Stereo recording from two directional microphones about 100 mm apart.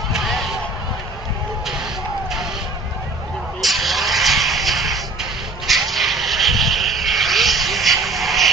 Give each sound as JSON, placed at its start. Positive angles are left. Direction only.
{"t": 0.1, "sound": "basketball bounce", "side_deg": 0}
{"t": 3.6, "sound": "vehicle", "side_deg": 0}